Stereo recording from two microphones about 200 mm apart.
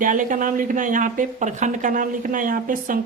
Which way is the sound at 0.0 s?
40° right (ahead or behind).